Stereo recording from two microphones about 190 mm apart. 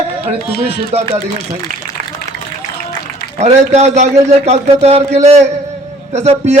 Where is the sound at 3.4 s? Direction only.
35° right (ahead or behind).